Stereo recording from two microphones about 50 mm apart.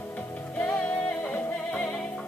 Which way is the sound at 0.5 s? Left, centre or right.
Left.